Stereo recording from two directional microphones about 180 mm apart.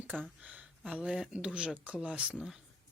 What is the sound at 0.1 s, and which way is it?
Speech, 10° right (ahead or behind).